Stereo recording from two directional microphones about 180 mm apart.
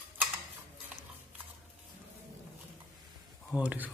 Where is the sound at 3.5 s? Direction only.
10° right (ahead or behind).